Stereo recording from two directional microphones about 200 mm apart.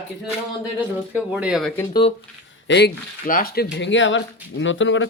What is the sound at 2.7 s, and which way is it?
Speech, 55° left (ahead or behind).